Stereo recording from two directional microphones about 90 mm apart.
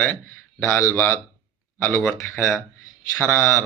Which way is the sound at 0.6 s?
30° left (ahead or behind).